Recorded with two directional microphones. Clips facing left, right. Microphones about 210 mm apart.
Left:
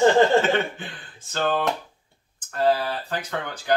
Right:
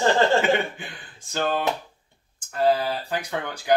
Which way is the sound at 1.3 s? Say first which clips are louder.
Left 1 dB; 10° right (ahead or behind).